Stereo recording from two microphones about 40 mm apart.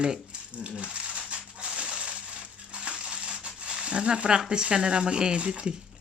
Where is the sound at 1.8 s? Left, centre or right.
Right.